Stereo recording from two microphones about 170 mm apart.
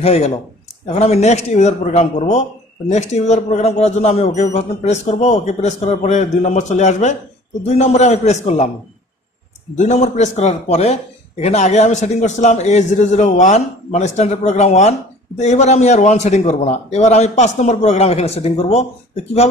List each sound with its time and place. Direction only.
0.0 s speech: 40° left (ahead or behind)
9.8 s speech: 45° left (ahead or behind)